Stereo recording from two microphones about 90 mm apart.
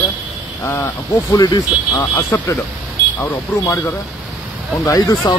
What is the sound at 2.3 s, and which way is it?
Speech, 30° left (ahead or behind).